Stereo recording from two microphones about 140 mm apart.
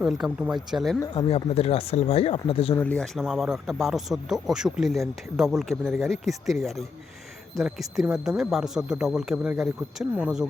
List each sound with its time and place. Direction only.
0.0 s speech: 5° right (ahead or behind)
1.1 s speech: 40° left (ahead or behind)
2.7 s speech: 10° left (ahead or behind)
3.2 s speech: 5° right (ahead or behind)